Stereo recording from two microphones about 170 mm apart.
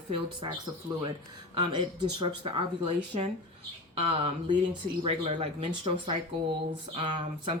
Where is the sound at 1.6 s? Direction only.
25° right (ahead or behind).